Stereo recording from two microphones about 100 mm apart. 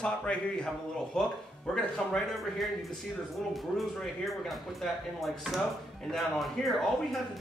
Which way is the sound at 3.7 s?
Centre (ahead or behind).